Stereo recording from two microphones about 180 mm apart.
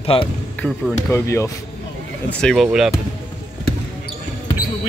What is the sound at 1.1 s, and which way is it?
Speech, 15° left (ahead or behind).